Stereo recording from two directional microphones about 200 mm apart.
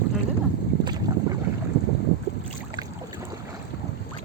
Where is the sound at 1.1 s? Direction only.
20° right (ahead or behind).